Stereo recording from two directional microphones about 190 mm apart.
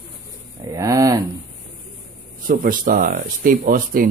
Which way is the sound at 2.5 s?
45° right (ahead or behind).